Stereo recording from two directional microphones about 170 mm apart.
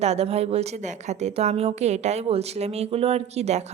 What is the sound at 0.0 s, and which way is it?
A woman's voice, 40° right (ahead or behind).